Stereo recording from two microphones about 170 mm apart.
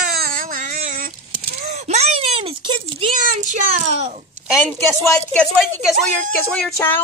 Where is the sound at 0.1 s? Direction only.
60° right (ahead or behind).